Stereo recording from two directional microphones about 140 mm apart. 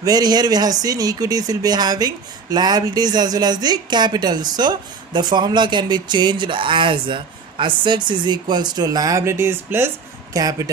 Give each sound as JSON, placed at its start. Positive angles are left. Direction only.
{"t": 0.0, "sound": "speech", "side_deg": -30}